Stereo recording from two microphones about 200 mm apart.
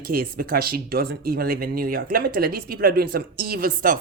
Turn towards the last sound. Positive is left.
turn(degrees=-45)  # may be behind; listen again after turning